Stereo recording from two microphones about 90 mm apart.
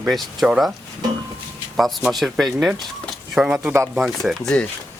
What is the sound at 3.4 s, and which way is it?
Speech, 10° right (ahead or behind).